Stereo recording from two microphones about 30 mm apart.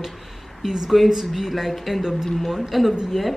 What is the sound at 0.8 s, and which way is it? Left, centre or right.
A woman's voice, centre.